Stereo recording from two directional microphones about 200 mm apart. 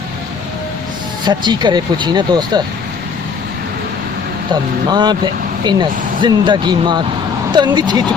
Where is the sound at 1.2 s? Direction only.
20° right (ahead or behind).